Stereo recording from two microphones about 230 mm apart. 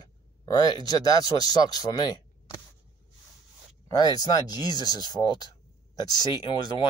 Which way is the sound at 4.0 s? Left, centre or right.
Centre.